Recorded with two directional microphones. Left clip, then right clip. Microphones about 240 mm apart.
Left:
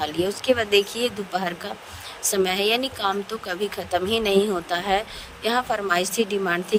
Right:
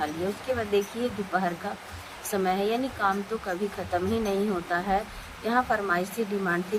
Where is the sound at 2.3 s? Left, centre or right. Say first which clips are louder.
Left 5 dB; left.